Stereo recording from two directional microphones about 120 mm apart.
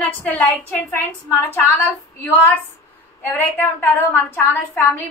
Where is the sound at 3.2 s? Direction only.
20° left (ahead or behind).